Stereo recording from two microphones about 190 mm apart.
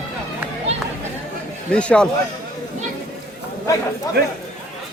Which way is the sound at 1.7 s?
5° left (ahead or behind).